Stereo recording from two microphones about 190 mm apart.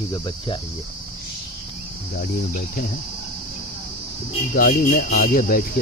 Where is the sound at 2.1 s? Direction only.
45° left (ahead or behind).